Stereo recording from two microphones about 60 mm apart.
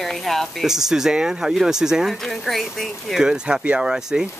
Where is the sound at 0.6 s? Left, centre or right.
Centre.